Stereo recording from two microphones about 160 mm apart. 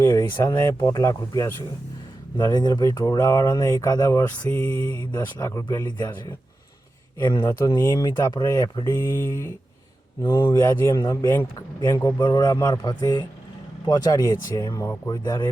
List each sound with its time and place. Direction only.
0.0 s speech: 25° left (ahead or behind)
7.2 s speech: 25° left (ahead or behind)